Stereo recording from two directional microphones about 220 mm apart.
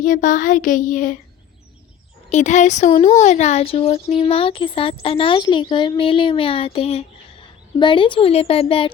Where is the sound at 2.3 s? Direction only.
35° left (ahead or behind).